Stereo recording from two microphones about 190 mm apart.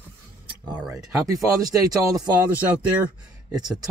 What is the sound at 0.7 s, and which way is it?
Speech, 15° right (ahead or behind).